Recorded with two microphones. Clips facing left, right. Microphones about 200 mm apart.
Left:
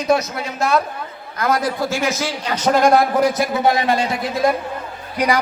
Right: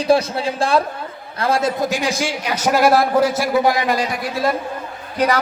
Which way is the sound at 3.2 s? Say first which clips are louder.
Even; 20° left (ahead or behind).